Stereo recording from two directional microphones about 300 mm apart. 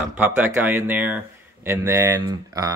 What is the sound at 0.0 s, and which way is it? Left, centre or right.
Speech, centre.